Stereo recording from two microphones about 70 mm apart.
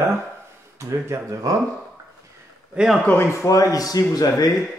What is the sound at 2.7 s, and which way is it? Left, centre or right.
Speech, centre.